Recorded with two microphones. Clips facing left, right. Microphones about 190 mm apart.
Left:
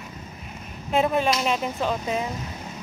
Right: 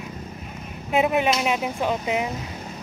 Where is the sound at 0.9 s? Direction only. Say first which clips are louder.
Right 1 dB; 15° right (ahead or behind).